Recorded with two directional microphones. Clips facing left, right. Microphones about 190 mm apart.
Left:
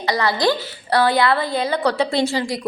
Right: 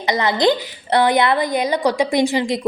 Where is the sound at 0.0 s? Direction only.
20° right (ahead or behind).